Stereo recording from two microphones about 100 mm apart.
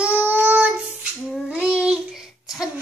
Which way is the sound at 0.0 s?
15° right (ahead or behind).